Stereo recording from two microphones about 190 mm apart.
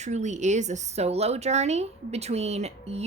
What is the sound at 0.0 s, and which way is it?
A woman's voice, 40° right (ahead or behind).